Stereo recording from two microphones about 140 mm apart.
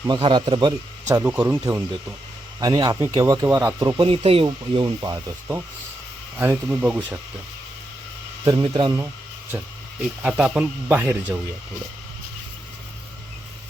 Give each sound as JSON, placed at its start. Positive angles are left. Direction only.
{"t": 0.1, "sound": "speech", "side_deg": -35}
{"t": 1.2, "sound": "speech", "side_deg": -10}
{"t": 2.6, "sound": "speech", "side_deg": -30}
{"t": 4.0, "sound": "speech", "side_deg": -40}
{"t": 6.4, "sound": "speech", "side_deg": -10}
{"t": 8.7, "sound": "speech", "side_deg": -25}
{"t": 9.5, "sound": "speech", "side_deg": -15}